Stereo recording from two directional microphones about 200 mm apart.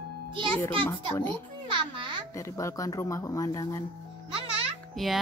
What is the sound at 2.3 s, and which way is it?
Speech, 15° left (ahead or behind).